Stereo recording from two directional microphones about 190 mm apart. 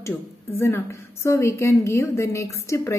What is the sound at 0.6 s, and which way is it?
A woman's voice, 15° left (ahead or behind).